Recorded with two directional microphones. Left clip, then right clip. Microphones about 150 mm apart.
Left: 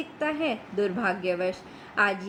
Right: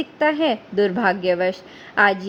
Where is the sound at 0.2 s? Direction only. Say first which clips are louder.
Right 9 dB; 45° right (ahead or behind).